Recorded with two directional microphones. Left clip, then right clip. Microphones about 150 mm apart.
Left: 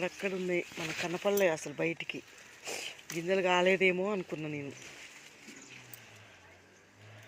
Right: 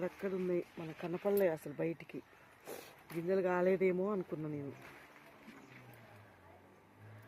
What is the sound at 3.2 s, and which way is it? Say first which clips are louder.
Speech: left 5 dB; 5° left (ahead or behind).